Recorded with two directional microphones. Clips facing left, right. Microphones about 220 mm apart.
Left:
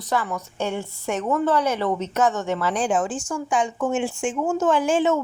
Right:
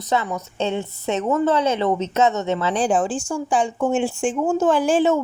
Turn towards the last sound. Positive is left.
turn(degrees=-35)  # may be behind; listen again after turning